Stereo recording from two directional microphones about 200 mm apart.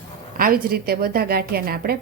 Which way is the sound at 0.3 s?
45° right (ahead or behind).